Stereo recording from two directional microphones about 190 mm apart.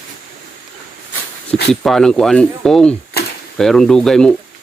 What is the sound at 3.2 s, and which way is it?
Typewriter, 55° left (ahead or behind).